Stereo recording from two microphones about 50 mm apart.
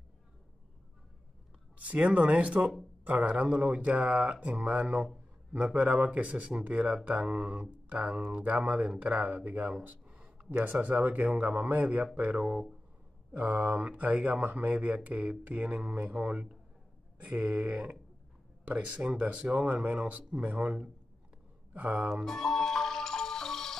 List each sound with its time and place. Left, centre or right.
1.9 s a man's voice: right
10.0 s a sound: centre
10.7 s a man's voice: right
14.7 s speech: right; by 17.6 s centre
18.9 s speech: centre
19.6 s speech: right
22.2 s music: centre